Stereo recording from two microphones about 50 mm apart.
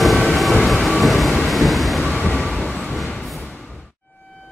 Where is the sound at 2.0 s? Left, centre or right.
Centre.